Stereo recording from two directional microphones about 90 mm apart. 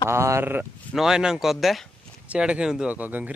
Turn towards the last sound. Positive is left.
turn(degrees=-20)  # may be behind; listen again after turning